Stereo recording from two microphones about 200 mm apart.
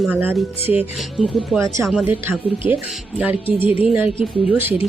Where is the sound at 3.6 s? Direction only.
25° left (ahead or behind).